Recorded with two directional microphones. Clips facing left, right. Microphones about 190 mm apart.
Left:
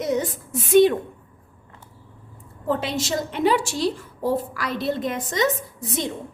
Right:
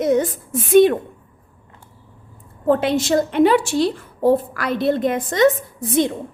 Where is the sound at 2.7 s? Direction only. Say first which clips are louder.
Right 7 dB; 55° right (ahead or behind).